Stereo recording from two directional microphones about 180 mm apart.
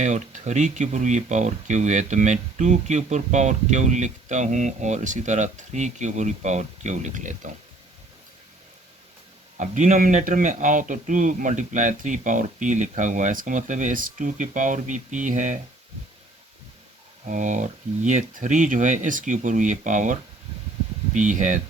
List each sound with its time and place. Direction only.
0.0 s speech: 40° right (ahead or behind)
9.6 s a man's voice: 45° right (ahead or behind)
17.2 s a man's voice: 45° right (ahead or behind)